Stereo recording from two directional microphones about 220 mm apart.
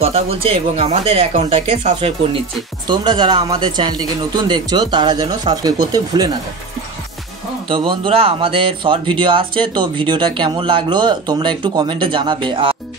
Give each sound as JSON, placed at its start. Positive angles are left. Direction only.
{"t": 0.0, "sound": "speech", "side_deg": -25}
{"t": 7.6, "sound": "speech", "side_deg": -25}